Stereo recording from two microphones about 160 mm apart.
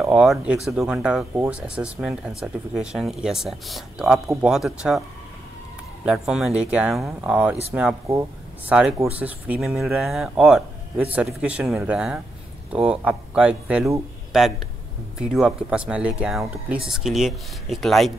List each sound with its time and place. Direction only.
0.0 s speech: 5° right (ahead or behind)
1.3 s speech: 15° right (ahead or behind)
1.6 s speech: 5° right (ahead or behind)
6.0 s speech: 5° right (ahead or behind)
8.1 s speech: 15° right (ahead or behind)
9.2 s speech: 5° right (ahead or behind)